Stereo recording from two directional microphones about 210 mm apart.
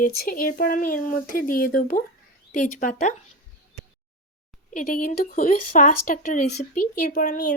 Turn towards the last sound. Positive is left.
turn(degrees=40)  # may be behind; listen again after turning